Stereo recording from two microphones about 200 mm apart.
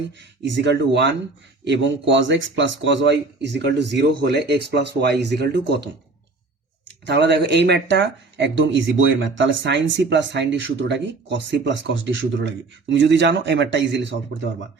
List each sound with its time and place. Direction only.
0.4 s speech: 65° right (ahead or behind)